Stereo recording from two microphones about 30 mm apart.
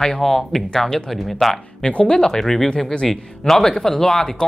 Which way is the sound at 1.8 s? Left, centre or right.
Left.